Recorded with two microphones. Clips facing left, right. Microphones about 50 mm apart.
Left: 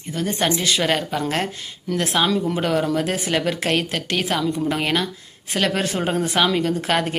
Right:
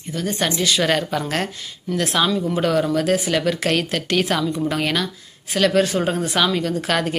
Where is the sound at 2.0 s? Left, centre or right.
Left.